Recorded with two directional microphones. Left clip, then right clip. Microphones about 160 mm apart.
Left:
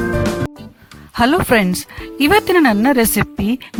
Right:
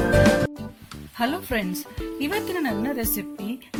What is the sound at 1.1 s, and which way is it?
Speech, 45° left (ahead or behind).